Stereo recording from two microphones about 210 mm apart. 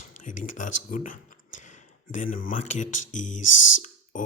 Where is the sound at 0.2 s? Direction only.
40° left (ahead or behind).